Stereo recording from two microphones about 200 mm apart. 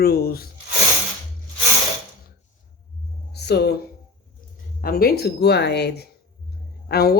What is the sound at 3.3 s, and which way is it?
Speech, 55° left (ahead or behind).